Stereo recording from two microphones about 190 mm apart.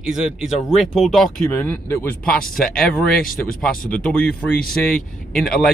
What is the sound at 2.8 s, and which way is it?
Speech, 50° left (ahead or behind).